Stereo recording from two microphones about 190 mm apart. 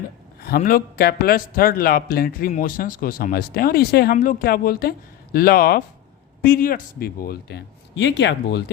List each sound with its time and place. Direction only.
0.4 s speech: 50° left (ahead or behind)